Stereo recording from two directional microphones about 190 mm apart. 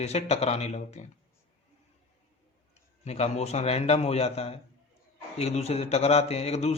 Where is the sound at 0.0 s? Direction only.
35° left (ahead or behind).